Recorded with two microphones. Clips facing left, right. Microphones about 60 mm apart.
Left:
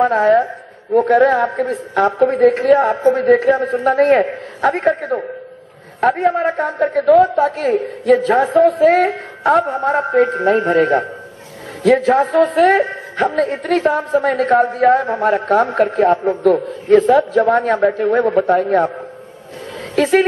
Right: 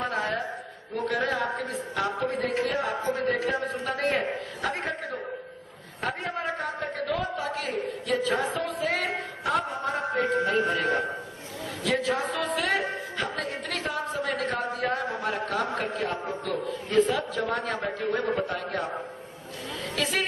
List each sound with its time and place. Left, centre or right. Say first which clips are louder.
0.0 s speech: left 16 dB; left
17.0 s speech: left 14 dB; left
20.0 s speech: left 15 dB; left